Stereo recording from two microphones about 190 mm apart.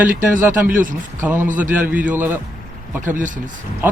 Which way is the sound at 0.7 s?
45° right (ahead or behind).